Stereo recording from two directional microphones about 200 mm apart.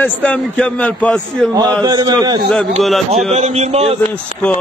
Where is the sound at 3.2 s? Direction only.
35° right (ahead or behind).